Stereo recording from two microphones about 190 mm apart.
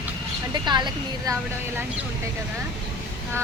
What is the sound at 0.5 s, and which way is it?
Speech, 25° right (ahead or behind).